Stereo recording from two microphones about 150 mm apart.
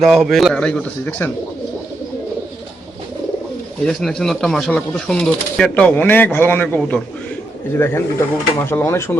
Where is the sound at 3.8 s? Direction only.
5° left (ahead or behind).